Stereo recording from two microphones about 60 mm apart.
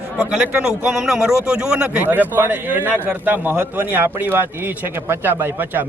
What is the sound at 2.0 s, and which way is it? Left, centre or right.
A man's voice, right.